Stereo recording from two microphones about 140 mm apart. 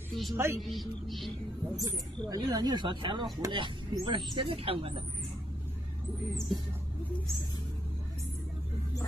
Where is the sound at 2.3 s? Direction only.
30° right (ahead or behind).